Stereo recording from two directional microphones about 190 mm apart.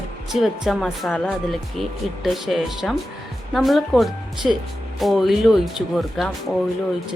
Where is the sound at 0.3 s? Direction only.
Centre (ahead or behind).